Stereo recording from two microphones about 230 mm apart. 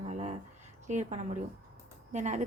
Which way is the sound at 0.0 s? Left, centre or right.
Right.